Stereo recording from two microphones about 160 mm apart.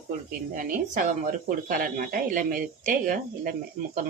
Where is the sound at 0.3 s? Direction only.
60° right (ahead or behind).